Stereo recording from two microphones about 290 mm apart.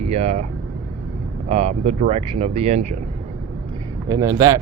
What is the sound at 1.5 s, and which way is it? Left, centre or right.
Speech, right.